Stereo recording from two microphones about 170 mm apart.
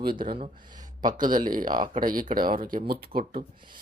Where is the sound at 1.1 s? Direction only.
55° right (ahead or behind).